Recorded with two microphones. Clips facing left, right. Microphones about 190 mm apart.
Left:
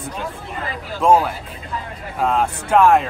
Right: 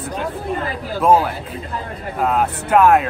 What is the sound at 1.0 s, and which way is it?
Speech, 5° right (ahead or behind).